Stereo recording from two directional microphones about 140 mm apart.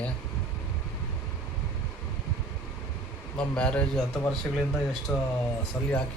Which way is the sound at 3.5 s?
10° left (ahead or behind).